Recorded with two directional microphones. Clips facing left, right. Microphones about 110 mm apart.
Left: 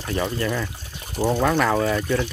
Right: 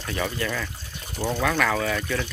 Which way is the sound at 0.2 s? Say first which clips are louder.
Left 3 dB; 20° left (ahead or behind).